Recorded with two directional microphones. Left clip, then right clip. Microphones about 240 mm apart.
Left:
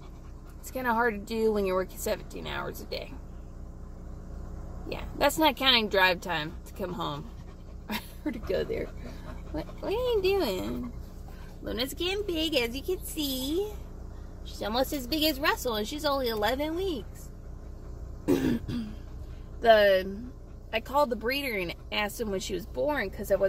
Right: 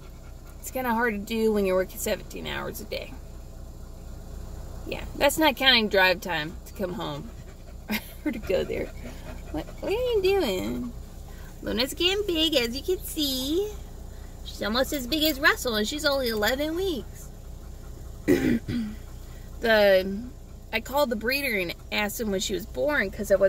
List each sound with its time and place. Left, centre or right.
0.8 s speech: centre
4.8 s speech: centre
9.6 s speech: centre
18.3 s speech: right
19.6 s speech: centre